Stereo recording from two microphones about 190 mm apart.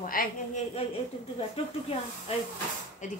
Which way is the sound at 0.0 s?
45° left (ahead or behind).